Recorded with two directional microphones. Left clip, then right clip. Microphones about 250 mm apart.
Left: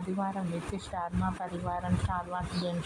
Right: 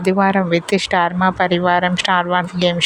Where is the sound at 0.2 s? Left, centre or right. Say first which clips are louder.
Right 17 dB; right.